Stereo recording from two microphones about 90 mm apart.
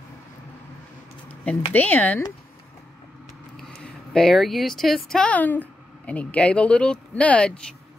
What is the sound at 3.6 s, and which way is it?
Speech, 5° left (ahead or behind).